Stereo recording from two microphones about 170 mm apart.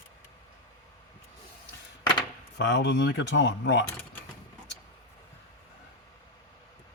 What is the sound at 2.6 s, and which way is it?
Speech, 90° left.